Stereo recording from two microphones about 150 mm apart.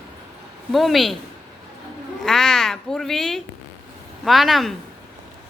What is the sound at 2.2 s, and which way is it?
Speech, centre (ahead or behind).